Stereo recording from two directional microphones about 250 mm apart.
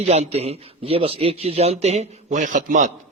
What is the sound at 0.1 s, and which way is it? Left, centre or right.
Speech, right.